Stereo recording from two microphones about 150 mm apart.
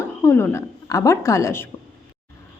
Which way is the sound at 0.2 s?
15° left (ahead or behind).